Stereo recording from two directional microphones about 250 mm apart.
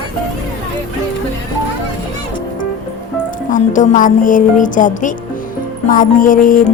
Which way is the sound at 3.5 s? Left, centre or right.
Left.